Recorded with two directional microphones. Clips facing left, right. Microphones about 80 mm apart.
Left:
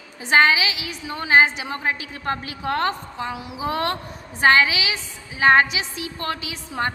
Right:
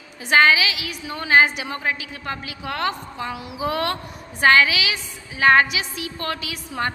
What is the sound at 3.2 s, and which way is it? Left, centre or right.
A woman's voice, left.